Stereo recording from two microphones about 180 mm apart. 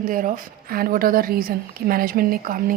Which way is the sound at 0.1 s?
50° right (ahead or behind).